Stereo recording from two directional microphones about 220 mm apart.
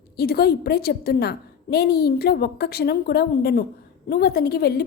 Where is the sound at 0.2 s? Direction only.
45° left (ahead or behind).